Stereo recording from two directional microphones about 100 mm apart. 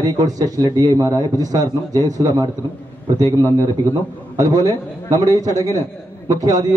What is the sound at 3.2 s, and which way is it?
Speech, 25° left (ahead or behind).